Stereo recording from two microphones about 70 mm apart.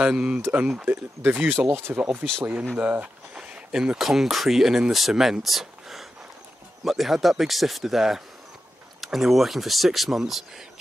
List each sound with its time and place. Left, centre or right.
0.0 s speech: centre
3.3 s speech: centre